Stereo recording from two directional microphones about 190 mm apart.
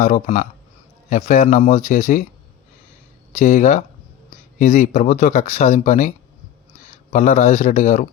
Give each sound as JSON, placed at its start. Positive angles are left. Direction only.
{"t": 0.0, "sound": "speech", "side_deg": 40}
{"t": 3.3, "sound": "speech", "side_deg": 40}
{"t": 7.1, "sound": "speech", "side_deg": 40}